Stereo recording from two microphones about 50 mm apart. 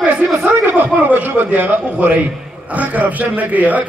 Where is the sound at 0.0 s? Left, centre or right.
Right.